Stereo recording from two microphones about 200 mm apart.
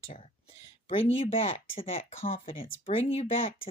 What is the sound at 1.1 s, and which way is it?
Speech, 30° left (ahead or behind).